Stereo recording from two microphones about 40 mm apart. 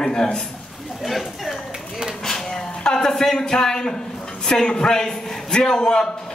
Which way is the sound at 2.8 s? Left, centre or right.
Centre.